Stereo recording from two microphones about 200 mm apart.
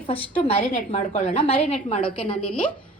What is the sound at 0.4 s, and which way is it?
A woman's voice, 30° left (ahead or behind).